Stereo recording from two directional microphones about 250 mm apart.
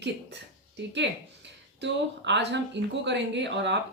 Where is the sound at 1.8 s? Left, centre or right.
Right.